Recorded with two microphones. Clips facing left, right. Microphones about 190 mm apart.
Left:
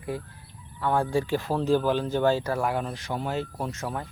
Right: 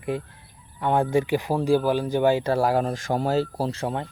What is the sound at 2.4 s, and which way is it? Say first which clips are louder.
Speech: right 6 dB; 30° right (ahead or behind).